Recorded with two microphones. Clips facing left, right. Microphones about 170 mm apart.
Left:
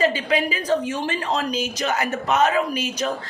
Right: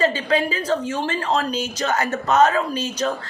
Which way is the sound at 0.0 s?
10° left (ahead or behind).